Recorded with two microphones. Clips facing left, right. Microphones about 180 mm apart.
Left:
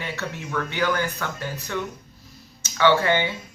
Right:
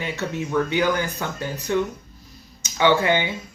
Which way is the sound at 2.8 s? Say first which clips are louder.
Right 1 dB; 15° right (ahead or behind).